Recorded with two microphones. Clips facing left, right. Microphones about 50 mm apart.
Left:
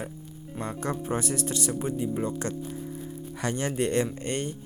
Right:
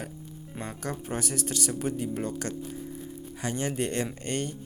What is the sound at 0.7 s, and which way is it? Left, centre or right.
Speech, left.